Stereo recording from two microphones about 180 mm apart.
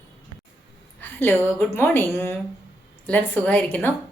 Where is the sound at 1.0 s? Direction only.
10° left (ahead or behind).